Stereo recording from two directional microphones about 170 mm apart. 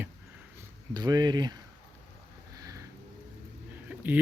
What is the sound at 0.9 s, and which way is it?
Speech, 25° right (ahead or behind).